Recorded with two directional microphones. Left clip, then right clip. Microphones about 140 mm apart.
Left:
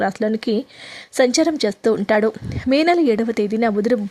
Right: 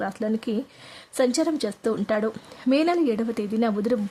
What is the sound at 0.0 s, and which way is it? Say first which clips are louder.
Speech: left 7 dB; 30° left (ahead or behind).